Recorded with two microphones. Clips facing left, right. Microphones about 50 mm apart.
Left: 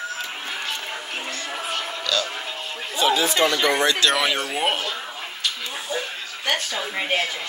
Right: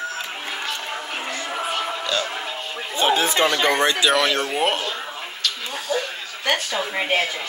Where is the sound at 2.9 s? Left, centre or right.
Right.